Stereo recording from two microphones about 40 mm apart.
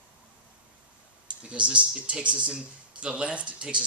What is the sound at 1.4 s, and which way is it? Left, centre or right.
Speech, right.